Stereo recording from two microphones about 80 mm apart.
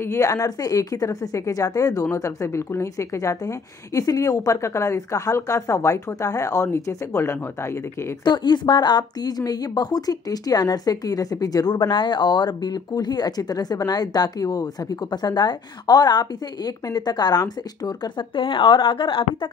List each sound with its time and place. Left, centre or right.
0.0 s a woman's voice: left
0.3 s speech: left
2.1 s a woman's voice: left
8.2 s speech: left
9.4 s a woman's voice: left
18.0 s speech: left